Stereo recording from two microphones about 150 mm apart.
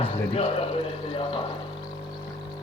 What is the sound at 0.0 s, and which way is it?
Speech, 40° left (ahead or behind).